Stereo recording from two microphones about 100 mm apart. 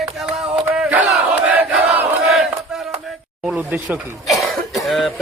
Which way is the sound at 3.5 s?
15° right (ahead or behind).